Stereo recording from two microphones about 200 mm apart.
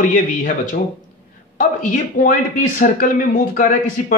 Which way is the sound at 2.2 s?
45° left (ahead or behind).